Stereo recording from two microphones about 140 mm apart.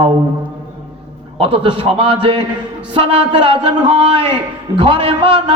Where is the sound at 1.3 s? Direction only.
45° right (ahead or behind).